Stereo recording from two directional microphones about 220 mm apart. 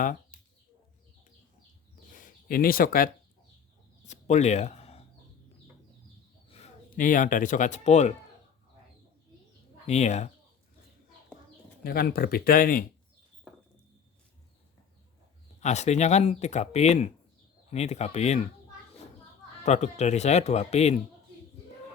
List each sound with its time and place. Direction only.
2.0 s a sound: 35° left (ahead or behind)
6.5 s speech: 30° left (ahead or behind)
9.8 s speech: 30° left (ahead or behind)
11.8 s speech: 45° left (ahead or behind)
15.6 s speech: 30° left (ahead or behind)
19.6 s speech: 30° left (ahead or behind)